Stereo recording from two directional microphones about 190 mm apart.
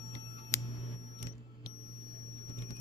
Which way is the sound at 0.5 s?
15° left (ahead or behind).